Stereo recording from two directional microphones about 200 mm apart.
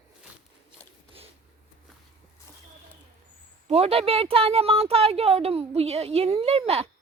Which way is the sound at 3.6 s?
30° right (ahead or behind).